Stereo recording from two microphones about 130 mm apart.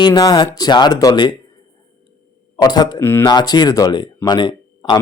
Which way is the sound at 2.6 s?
30° left (ahead or behind).